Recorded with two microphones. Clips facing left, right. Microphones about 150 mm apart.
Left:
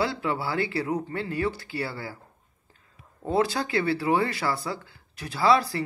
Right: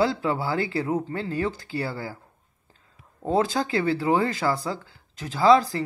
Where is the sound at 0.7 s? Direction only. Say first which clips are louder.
Right 2 dB; 25° right (ahead or behind).